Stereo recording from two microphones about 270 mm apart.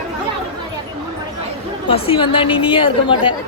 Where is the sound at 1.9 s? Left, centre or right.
Centre.